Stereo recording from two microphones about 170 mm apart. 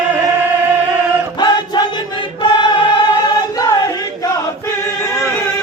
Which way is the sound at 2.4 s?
25° left (ahead or behind).